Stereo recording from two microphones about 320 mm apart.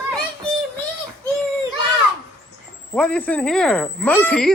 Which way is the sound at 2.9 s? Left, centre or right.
Centre.